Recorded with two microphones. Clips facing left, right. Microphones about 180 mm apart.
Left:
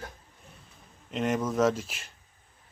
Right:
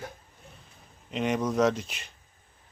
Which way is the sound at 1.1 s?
Centre (ahead or behind).